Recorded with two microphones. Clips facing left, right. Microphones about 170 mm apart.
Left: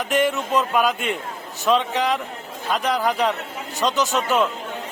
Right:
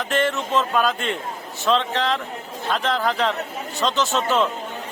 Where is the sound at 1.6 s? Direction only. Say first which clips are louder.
Left 1 dB; 15° left (ahead or behind).